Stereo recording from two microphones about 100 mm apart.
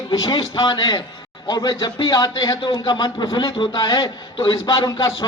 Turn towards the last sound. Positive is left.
turn(degrees=35)  # may be behind; listen again after turning